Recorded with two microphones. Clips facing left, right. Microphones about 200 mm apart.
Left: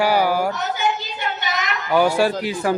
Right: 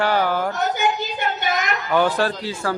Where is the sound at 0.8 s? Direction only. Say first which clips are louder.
Right 1 dB; 50° right (ahead or behind).